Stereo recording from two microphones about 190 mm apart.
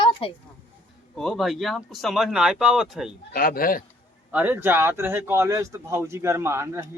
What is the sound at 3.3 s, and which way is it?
Speech, 50° left (ahead or behind).